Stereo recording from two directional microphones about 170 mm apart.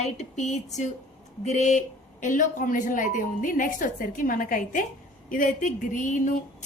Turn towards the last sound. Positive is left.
turn(degrees=50)  # may be behind; listen again after turning